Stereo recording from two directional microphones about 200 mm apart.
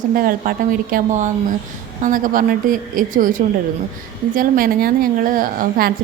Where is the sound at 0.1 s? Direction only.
45° right (ahead or behind).